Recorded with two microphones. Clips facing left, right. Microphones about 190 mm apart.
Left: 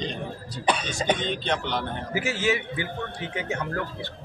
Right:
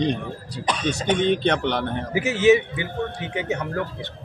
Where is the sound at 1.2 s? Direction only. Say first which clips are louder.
Right 8 dB; 65° right (ahead or behind).